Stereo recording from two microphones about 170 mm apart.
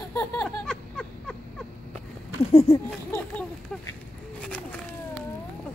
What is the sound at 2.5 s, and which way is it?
Speech, 40° left (ahead or behind).